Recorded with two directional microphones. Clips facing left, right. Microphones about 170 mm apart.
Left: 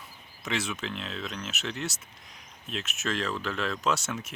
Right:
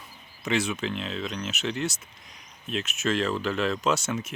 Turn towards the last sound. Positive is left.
turn(degrees=0)  # may be behind; listen again after turning